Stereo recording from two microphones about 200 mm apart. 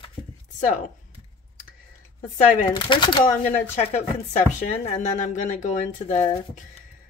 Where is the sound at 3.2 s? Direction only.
35° left (ahead or behind).